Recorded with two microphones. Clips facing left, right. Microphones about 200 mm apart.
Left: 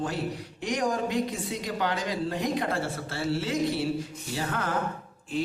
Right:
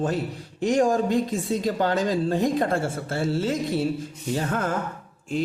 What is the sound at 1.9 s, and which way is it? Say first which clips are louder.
Speech: right 7 dB; 50° right (ahead or behind).